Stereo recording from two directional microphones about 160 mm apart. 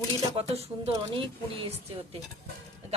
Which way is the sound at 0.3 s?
40° right (ahead or behind).